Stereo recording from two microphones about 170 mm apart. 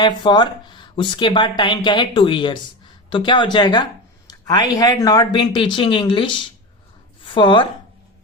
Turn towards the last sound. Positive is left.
turn(degrees=30)  # may be behind; listen again after turning